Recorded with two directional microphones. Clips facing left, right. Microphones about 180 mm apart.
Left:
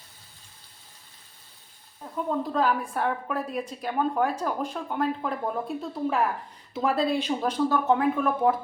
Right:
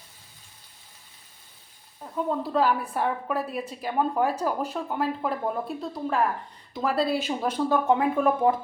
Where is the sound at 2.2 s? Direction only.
Centre (ahead or behind).